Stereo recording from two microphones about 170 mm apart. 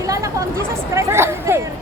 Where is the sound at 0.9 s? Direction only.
15° right (ahead or behind).